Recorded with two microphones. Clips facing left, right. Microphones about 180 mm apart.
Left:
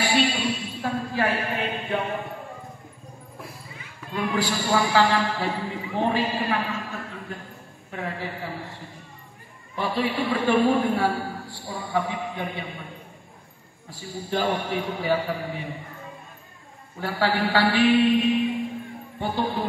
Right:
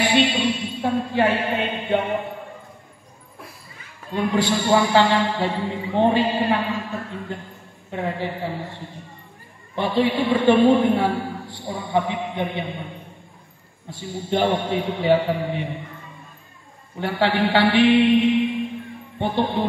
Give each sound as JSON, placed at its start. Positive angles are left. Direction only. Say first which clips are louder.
{"t": 0.0, "sound": "a sound", "louder": "right 4 dB", "side_deg": -20}
{"t": 4.6, "sound": "a man's voice", "louder": "right 3 dB", "side_deg": -25}
{"t": 9.8, "sound": "a man's voice", "louder": "right 5 dB", "side_deg": -25}
{"t": 13.8, "sound": "a man's voice", "louder": "right 5 dB", "side_deg": -25}
{"t": 17.0, "sound": "a man's voice", "louder": "right 4 dB", "side_deg": -25}